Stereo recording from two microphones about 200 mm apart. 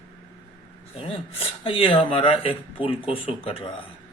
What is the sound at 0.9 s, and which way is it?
Speech, 30° left (ahead or behind).